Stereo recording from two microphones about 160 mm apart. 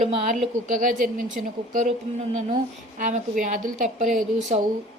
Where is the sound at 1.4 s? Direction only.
65° right (ahead or behind).